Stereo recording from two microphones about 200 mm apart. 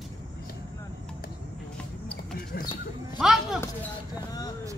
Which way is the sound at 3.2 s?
Centre (ahead or behind).